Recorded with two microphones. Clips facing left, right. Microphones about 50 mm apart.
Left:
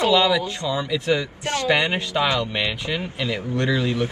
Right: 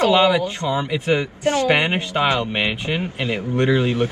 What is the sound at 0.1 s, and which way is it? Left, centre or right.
A man's voice, right.